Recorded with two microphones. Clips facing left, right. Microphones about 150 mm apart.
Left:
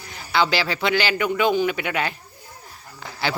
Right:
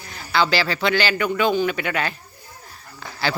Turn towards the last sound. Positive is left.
turn(degrees=15)  # may be behind; listen again after turning